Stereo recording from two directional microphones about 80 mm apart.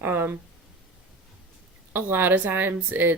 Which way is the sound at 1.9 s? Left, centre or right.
Right.